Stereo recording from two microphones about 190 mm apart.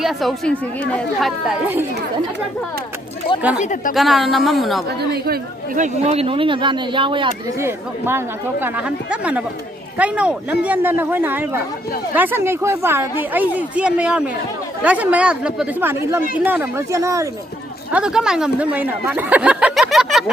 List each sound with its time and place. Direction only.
0.0 s speech: centre (ahead or behind)
3.6 s a woman's voice: 40° left (ahead or behind)
3.9 s speech: centre (ahead or behind)
4.9 s speech: 55° right (ahead or behind); by 7.3 s 25° right (ahead or behind)
7.6 s a woman's voice: 10° right (ahead or behind)
17.9 s speech: 5° right (ahead or behind)